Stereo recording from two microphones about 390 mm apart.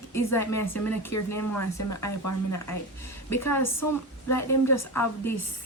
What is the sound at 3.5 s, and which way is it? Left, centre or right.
Speech, centre.